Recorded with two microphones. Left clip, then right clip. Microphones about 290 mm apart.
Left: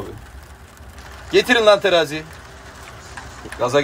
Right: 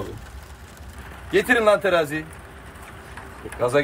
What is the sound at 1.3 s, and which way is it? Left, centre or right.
Speech, centre.